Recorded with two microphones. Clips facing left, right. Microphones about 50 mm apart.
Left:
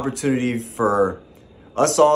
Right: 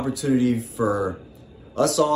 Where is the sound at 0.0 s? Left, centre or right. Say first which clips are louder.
Even; left.